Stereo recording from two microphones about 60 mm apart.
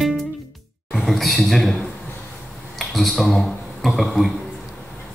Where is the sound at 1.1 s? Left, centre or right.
Centre.